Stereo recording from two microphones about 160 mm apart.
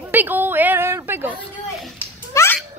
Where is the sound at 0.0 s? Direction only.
10° right (ahead or behind).